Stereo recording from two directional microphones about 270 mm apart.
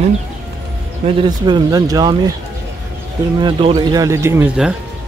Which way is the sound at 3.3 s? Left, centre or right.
Centre.